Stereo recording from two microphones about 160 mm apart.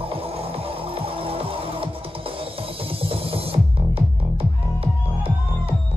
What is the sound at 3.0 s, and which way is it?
Music, 35° right (ahead or behind).